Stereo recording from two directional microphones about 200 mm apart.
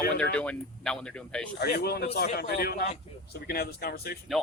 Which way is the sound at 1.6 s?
50° left (ahead or behind).